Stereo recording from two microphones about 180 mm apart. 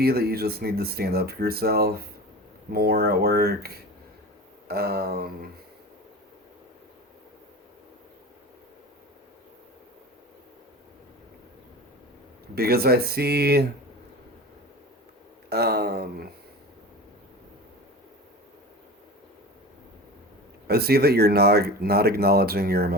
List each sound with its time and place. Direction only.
0.0 s speech: 60° right (ahead or behind)
12.5 s speech: 60° right (ahead or behind)
15.4 s speech: 65° right (ahead or behind)
20.7 s speech: 60° right (ahead or behind)